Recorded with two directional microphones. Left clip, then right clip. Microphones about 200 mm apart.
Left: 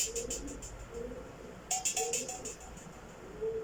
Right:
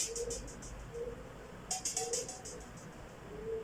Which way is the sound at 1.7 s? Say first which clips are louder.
Left 4 dB; 5° left (ahead or behind).